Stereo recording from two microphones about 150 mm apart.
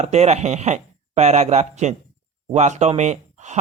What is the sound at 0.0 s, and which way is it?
Speech, 45° right (ahead or behind).